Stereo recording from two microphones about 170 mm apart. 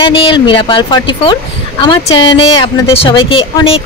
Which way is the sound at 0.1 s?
30° left (ahead or behind).